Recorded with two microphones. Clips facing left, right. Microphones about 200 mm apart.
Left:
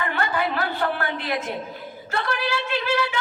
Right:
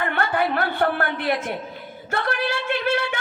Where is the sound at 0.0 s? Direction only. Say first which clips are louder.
Right 2 dB; 55° right (ahead or behind).